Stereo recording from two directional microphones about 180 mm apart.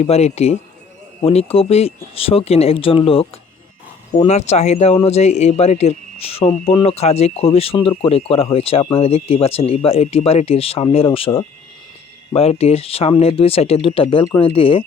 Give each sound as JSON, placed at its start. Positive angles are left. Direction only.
{"t": 0.0, "sound": "speech", "side_deg": 35}
{"t": 12.3, "sound": "speech", "side_deg": 35}